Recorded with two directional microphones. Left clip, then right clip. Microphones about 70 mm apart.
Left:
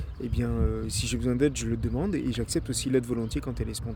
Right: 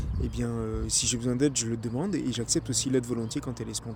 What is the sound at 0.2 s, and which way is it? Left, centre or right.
Speech, left.